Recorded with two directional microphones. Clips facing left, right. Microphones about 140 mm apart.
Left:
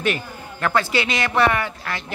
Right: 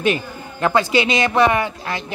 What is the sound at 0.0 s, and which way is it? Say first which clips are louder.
Speech: right 4 dB; 20° right (ahead or behind).